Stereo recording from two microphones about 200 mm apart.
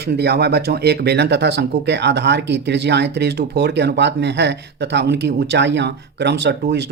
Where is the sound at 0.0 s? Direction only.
55° right (ahead or behind).